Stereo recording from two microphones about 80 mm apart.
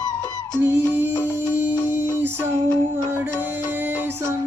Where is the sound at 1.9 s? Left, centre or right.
Right.